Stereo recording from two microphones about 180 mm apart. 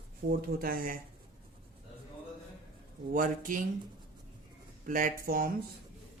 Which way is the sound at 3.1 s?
50° right (ahead or behind).